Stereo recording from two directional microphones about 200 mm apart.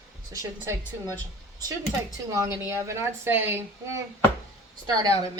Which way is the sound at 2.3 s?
15° right (ahead or behind).